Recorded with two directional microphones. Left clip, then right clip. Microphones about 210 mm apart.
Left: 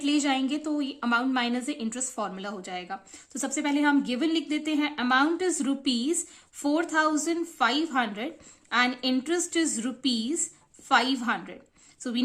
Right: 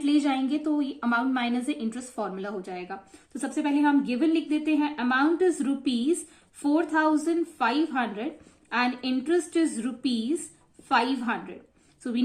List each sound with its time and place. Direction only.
0.0 s a woman's voice: 30° left (ahead or behind)